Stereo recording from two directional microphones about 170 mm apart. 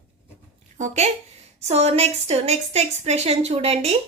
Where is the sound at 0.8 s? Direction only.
40° right (ahead or behind).